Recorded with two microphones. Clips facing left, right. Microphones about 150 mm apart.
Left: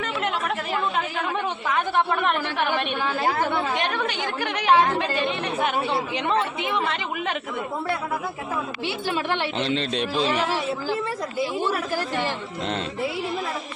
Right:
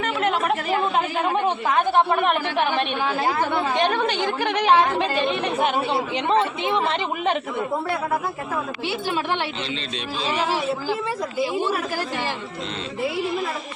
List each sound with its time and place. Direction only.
1.2 s speech: 25° right (ahead or behind)
3.8 s speech: 30° right (ahead or behind)
9.6 s speech: 55° left (ahead or behind)